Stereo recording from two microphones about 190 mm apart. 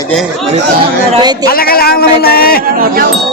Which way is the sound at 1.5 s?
50° left (ahead or behind).